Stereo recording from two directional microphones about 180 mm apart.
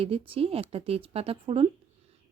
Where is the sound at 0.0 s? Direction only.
35° right (ahead or behind).